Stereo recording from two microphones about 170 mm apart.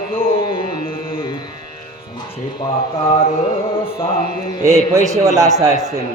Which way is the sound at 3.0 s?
35° left (ahead or behind).